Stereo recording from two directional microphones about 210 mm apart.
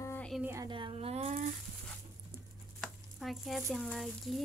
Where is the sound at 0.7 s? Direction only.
25° right (ahead or behind).